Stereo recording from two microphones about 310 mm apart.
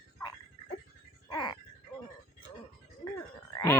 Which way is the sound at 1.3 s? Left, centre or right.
Centre.